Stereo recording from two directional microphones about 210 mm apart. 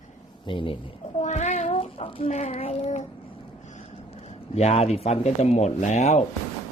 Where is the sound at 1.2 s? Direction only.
35° left (ahead or behind).